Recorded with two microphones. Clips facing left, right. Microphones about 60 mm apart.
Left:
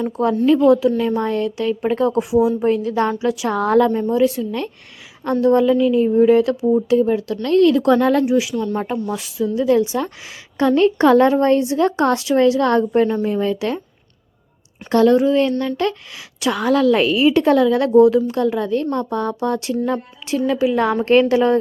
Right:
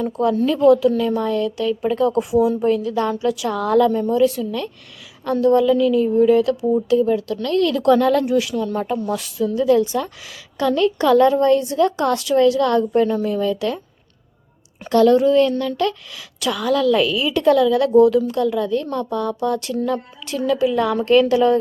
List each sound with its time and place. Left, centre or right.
0.0 s a woman's voice: left
2.3 s a woman's voice: centre
8.2 s a woman's voice: centre; by 13.8 s left
14.8 s a woman's voice: left